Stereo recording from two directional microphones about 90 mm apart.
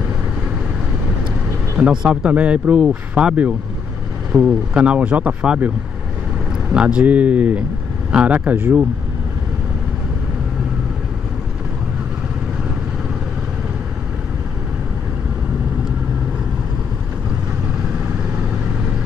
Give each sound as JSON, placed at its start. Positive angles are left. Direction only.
{"t": 1.8, "sound": "speech", "side_deg": -10}
{"t": 6.7, "sound": "speech", "side_deg": -10}